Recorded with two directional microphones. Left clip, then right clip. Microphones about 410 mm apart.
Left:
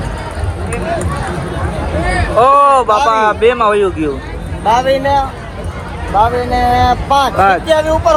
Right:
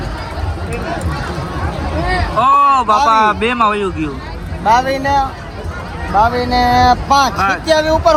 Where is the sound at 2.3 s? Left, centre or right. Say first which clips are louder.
Left 3 dB; centre.